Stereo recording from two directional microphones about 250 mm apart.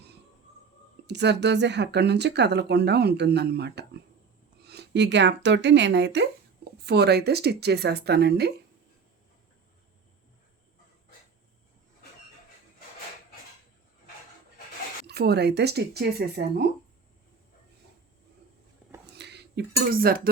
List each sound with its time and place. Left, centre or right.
1.0 s speech: right
15.0 s speech: right
19.1 s speech: right